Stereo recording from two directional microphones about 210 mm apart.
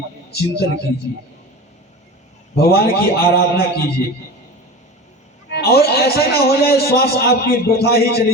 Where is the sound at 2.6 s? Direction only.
50° left (ahead or behind).